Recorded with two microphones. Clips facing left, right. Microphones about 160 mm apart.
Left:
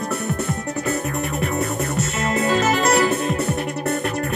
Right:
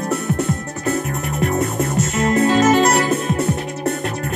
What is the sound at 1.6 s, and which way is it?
Music, 65° left (ahead or behind).